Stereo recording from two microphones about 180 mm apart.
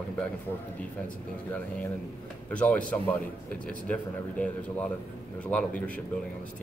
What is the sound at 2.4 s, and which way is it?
Speech, 10° left (ahead or behind).